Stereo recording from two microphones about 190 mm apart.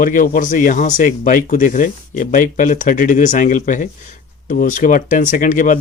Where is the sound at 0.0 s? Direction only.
45° left (ahead or behind).